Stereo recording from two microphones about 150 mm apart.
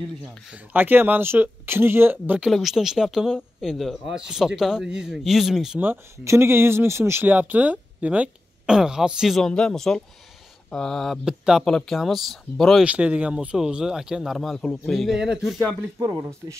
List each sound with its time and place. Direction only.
0.5 s speech: 10° right (ahead or behind)
5.9 s speech: 15° right (ahead or behind); by 15.2 s centre (ahead or behind)
16.0 s speech: 20° right (ahead or behind)